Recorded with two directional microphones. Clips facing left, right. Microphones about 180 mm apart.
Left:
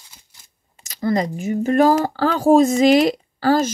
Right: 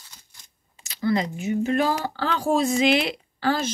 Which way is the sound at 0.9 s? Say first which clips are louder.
Left 3 dB; 40° left (ahead or behind).